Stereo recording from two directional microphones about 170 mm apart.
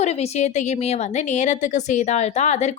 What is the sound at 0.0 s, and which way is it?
A woman's voice, 40° left (ahead or behind).